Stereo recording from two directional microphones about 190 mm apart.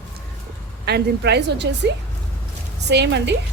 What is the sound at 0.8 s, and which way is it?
Speech, 60° right (ahead or behind).